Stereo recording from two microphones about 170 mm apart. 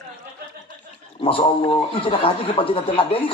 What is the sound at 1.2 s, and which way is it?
A man's voice, 30° left (ahead or behind).